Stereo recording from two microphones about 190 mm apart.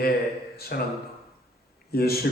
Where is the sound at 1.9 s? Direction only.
55° left (ahead or behind).